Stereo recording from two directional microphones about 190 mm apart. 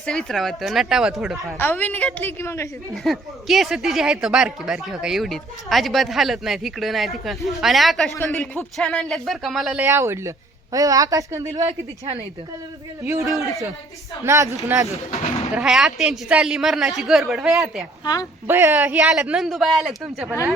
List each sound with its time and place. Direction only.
0.0 s speech: 5° left (ahead or behind)
1.5 s a woman's voice: 10° left (ahead or behind)
2.9 s speech: centre (ahead or behind)
8.1 s a woman's voice: 15° left (ahead or behind); by 11.7 s 15° right (ahead or behind)
13.1 s a man's voice: 15° right (ahead or behind)
15.5 s speech: centre (ahead or behind)
18.0 s speech: 20° left (ahead or behind)
18.4 s speech: 10° right (ahead or behind)